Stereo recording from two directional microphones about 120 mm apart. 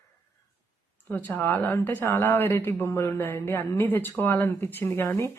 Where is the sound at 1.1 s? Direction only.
15° left (ahead or behind).